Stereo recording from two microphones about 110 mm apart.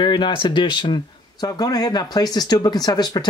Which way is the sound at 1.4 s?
35° left (ahead or behind).